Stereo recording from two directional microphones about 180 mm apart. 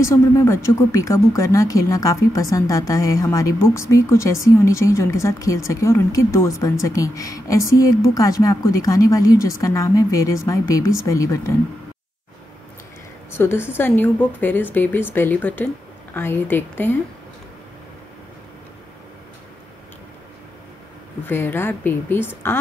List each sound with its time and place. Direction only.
0.0 s a woman's voice: 15° left (ahead or behind)
13.3 s a woman's voice: 10° left (ahead or behind)
21.3 s a woman's voice: 10° left (ahead or behind)